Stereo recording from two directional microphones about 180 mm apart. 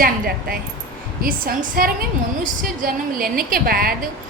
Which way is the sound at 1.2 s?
55° right (ahead or behind).